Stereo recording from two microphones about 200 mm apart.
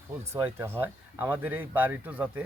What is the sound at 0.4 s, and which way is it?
Speech, 10° right (ahead or behind).